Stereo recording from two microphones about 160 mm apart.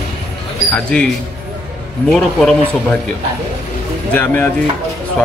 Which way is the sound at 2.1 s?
Centre (ahead or behind).